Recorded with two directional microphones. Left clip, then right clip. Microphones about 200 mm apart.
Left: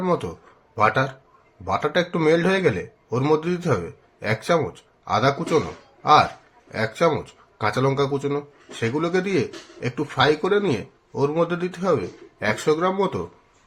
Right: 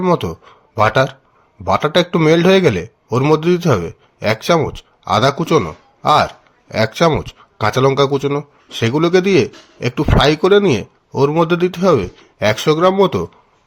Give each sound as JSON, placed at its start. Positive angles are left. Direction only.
{"t": 0.0, "sound": "a man's voice", "side_deg": -40}